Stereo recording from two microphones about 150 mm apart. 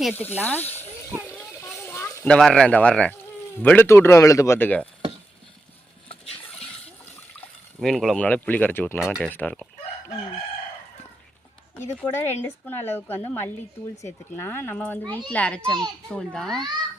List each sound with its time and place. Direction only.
0.1 s a woman's voice: 15° left (ahead or behind)
1.4 s a sound: 15° left (ahead or behind)
2.2 s a woman's voice: 5° left (ahead or behind)
6.1 s a sound: 10° left (ahead or behind)
7.8 s a woman's voice: centre (ahead or behind)
9.0 s a child's voice: centre (ahead or behind)
12.1 s a woman's voice: 15° left (ahead or behind)